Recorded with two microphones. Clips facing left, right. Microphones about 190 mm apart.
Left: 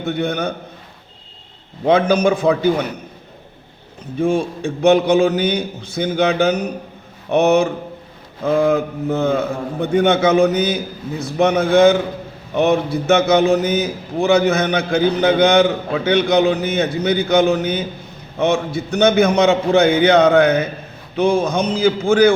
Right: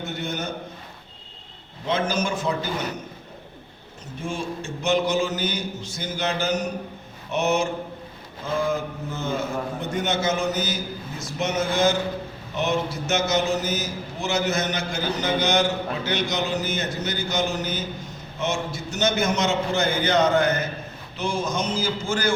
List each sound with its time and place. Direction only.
0.0 s a man's voice: 60° left (ahead or behind)
1.8 s a man's voice: 60° left (ahead or behind)
4.2 s a man's voice: 60° left (ahead or behind)